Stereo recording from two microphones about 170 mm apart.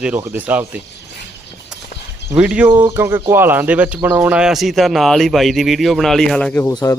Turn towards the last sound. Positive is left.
turn(degrees=20)  # may be behind; listen again after turning